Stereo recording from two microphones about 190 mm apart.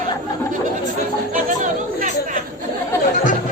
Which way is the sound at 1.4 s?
40° right (ahead or behind).